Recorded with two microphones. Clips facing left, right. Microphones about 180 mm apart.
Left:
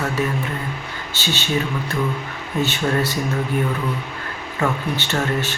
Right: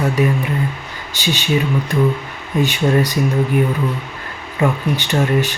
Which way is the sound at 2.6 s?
15° right (ahead or behind).